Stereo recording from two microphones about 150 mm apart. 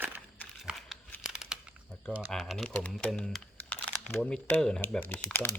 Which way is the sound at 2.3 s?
Centre (ahead or behind).